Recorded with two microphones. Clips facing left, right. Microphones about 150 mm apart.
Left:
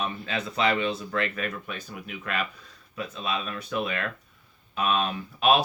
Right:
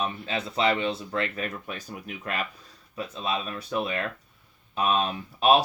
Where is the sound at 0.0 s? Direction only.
30° right (ahead or behind).